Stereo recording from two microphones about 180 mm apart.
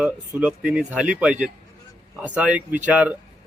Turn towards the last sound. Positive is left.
turn(degrees=-10)  # may be behind; listen again after turning